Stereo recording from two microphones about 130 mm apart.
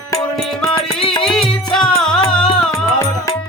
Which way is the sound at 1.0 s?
45° left (ahead or behind).